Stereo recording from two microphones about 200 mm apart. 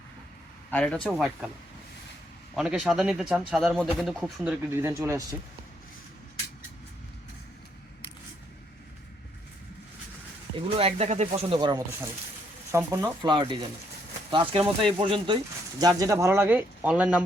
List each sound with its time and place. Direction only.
0.7 s speech: 5° left (ahead or behind)
2.6 s speech: centre (ahead or behind)
10.5 s speech: 30° right (ahead or behind); by 17.2 s 5° right (ahead or behind)